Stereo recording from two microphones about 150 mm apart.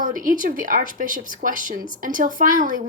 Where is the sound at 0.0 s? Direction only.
65° right (ahead or behind).